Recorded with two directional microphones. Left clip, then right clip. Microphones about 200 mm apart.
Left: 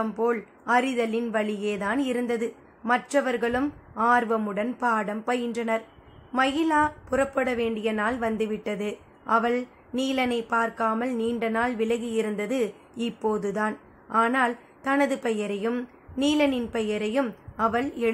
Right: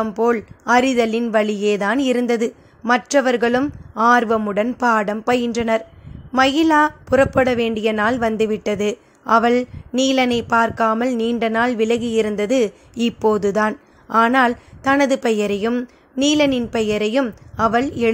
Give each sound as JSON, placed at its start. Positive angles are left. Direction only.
{"t": 0.0, "sound": "a woman's voice", "side_deg": -35}